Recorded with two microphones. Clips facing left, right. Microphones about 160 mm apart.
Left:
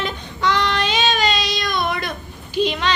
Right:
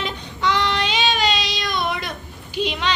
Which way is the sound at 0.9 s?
45° left (ahead or behind).